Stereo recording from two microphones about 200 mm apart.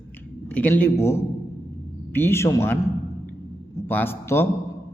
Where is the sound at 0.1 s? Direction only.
10° left (ahead or behind).